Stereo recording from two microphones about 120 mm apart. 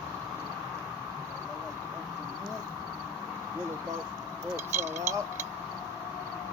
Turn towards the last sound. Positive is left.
turn(degrees=-25)  # may be behind; listen again after turning